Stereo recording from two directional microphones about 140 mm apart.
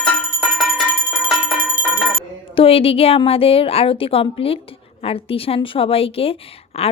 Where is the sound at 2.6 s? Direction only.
45° left (ahead or behind).